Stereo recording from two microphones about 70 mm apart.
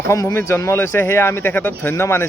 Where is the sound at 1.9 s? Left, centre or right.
Left.